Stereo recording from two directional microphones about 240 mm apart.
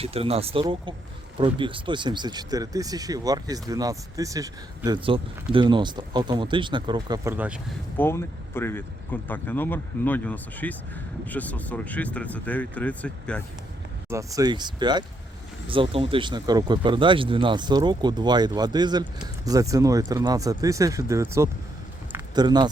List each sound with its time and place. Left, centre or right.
0.0 s speech: right; by 7.6 s centre
7.9 s speech: centre
14.1 s speech: centre
22.1 s a sound: centre